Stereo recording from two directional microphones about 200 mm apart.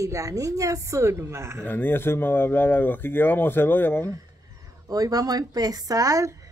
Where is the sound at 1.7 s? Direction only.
10° left (ahead or behind).